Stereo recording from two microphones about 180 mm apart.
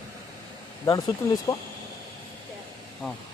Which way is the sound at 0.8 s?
20° left (ahead or behind).